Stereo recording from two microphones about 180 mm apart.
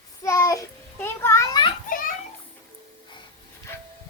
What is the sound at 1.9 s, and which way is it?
Children playing, 50° left (ahead or behind).